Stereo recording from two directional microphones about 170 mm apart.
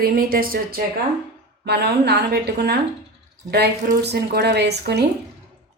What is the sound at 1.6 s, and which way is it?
Speech, 75° right (ahead or behind).